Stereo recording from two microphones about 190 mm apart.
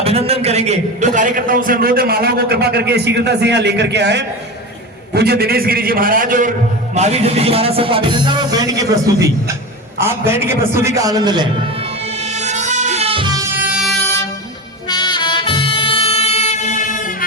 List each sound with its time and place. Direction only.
0.0 s a man's voice: 30° right (ahead or behind)
6.9 s speech: 35° right (ahead or behind); by 8.9 s 20° right (ahead or behind)
10.0 s music: 15° right (ahead or behind)
13.6 s music: 5° right (ahead or behind)
14.8 s music: 25° left (ahead or behind); by 17.2 s 45° left (ahead or behind)